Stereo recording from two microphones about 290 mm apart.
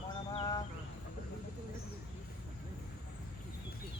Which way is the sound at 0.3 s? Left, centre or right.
Centre.